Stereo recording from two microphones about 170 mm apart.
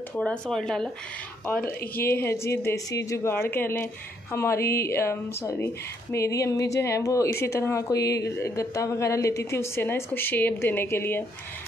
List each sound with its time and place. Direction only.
0.1 s a woman's voice: 5° left (ahead or behind)